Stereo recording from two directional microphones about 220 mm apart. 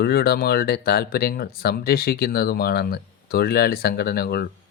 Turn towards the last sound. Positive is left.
turn(degrees=45)  # may be behind; listen again after turning